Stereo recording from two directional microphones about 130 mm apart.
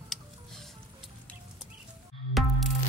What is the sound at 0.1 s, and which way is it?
Patter, centre (ahead or behind).